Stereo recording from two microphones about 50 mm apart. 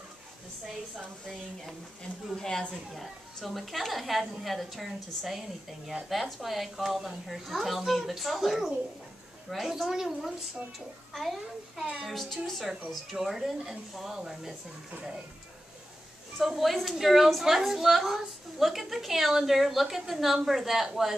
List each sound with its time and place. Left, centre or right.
2.3 s a woman's voice: centre
2.7 s a woman's voice: centre
14.9 s speech: right
16.3 s a woman's voice: centre